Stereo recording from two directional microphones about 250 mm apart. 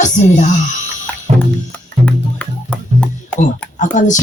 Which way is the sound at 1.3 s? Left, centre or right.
Right.